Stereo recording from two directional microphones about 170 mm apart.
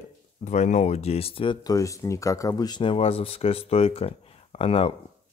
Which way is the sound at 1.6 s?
20° left (ahead or behind).